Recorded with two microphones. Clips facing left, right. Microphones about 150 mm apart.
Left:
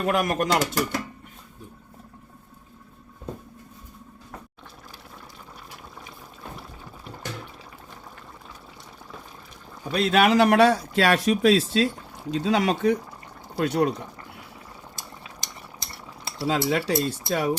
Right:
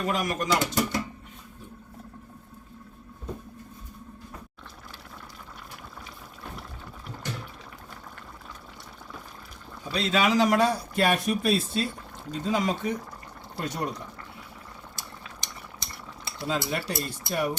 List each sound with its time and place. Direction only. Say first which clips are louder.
0.0 s speech: left 5 dB; 60° left (ahead or behind)
9.9 s speech: left 5 dB; 55° left (ahead or behind)
16.5 s speech: left 6 dB; 90° left